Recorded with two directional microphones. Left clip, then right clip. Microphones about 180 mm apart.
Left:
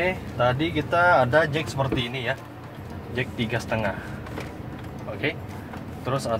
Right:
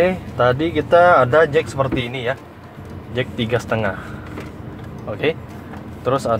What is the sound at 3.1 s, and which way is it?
Speech, 50° right (ahead or behind).